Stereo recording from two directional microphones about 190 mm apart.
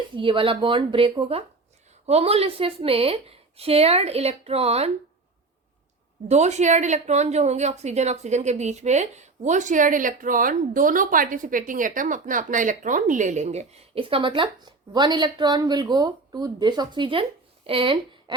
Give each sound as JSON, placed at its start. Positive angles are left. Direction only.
{"t": 0.2, "sound": "a woman's voice", "side_deg": -25}
{"t": 6.2, "sound": "a woman's voice", "side_deg": -35}